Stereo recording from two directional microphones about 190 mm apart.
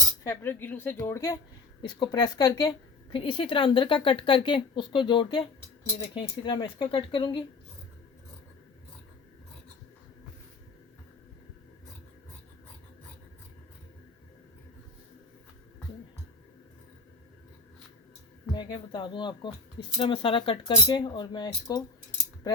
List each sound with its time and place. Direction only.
0.3 s a woman's voice: 10° left (ahead or behind)
18.5 s a woman's voice: 25° left (ahead or behind)